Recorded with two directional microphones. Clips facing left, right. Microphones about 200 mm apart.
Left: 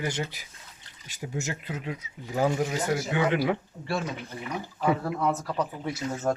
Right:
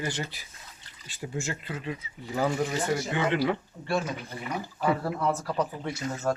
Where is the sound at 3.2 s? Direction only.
15° left (ahead or behind).